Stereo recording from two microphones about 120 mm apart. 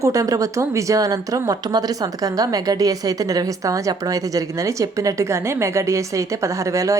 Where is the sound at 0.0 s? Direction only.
30° right (ahead or behind).